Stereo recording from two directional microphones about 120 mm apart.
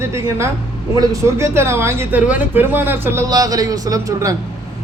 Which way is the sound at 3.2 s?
30° right (ahead or behind).